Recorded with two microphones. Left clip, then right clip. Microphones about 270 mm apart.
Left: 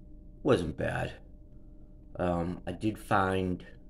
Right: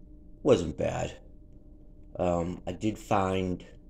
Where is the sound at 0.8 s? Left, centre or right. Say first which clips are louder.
Right 2 dB; left.